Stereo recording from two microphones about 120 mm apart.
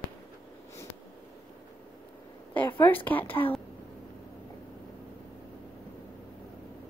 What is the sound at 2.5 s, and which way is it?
Speech, 15° left (ahead or behind).